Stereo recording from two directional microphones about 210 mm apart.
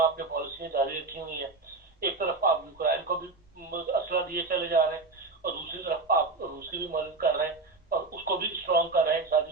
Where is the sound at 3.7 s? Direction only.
45° right (ahead or behind).